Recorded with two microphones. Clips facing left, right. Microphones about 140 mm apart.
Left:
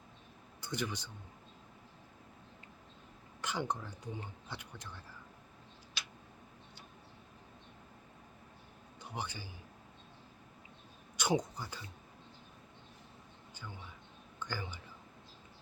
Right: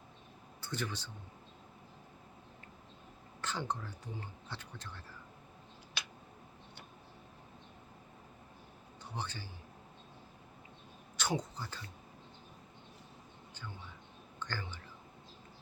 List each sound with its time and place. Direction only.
0.6 s speech: 15° left (ahead or behind)
3.4 s speech: 15° left (ahead or behind)
6.0 s tick: 60° right (ahead or behind)
9.0 s a man's voice: 10° left (ahead or behind)
11.2 s speech: 15° left (ahead or behind)
14.3 s speech: 10° left (ahead or behind)